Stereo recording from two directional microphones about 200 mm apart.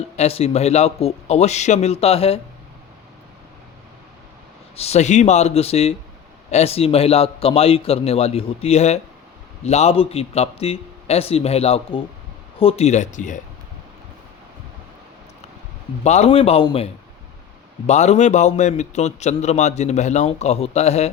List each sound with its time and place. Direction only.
0.2 s a man's voice: 30° left (ahead or behind)
4.8 s a man's voice: 35° left (ahead or behind)
16.0 s a man's voice: 35° left (ahead or behind)